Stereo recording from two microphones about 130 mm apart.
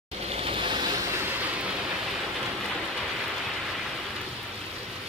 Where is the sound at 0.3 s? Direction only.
45° right (ahead or behind).